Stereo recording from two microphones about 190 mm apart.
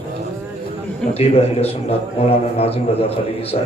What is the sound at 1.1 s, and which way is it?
A man's voice, 30° left (ahead or behind).